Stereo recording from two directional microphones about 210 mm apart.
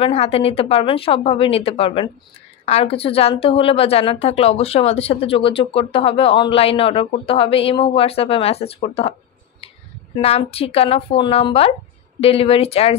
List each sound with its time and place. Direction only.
0.0 s a woman's voice: 30° left (ahead or behind)
10.1 s a woman's voice: 30° left (ahead or behind)